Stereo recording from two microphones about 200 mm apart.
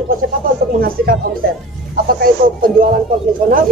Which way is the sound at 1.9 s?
45° right (ahead or behind).